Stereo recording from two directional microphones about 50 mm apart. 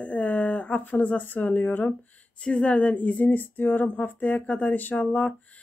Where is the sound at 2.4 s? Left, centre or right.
Left.